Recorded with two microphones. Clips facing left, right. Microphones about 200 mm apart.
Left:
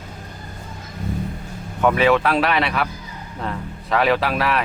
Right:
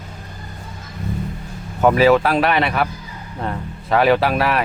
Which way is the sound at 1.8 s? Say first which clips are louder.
Right 3 dB; 35° right (ahead or behind).